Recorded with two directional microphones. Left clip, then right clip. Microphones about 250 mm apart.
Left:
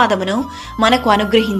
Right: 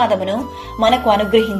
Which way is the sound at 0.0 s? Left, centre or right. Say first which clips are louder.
Left 1 dB; left.